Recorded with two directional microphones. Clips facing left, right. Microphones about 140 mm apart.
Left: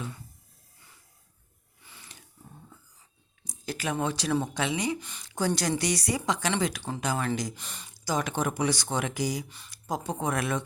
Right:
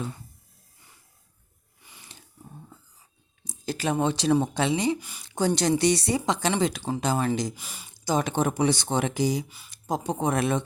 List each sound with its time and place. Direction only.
1.8 s a sound: 15° right (ahead or behind)
3.4 s a sound: 25° right (ahead or behind)
3.9 s speech: 25° right (ahead or behind)
4.9 s speech: 10° right (ahead or behind)
5.3 s speech: 25° right (ahead or behind)
7.5 s speech: 10° right (ahead or behind)
7.9 s speech: 25° right (ahead or behind)